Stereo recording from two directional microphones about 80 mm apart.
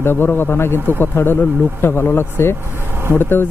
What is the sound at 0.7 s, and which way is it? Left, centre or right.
Speech, right.